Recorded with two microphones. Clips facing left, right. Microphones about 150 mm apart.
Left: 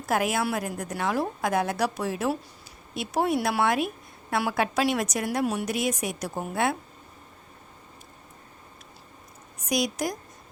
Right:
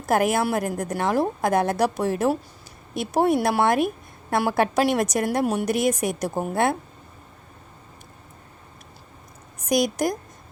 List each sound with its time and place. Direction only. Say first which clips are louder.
0.0 s a woman's voice: right 5 dB; 45° right (ahead or behind)
9.6 s a woman's voice: right 5 dB; 50° right (ahead or behind)